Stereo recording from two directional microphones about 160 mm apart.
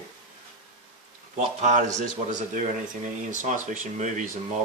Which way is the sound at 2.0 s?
50° right (ahead or behind).